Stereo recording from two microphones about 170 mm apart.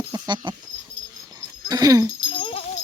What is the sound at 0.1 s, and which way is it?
Dog, 25° right (ahead or behind).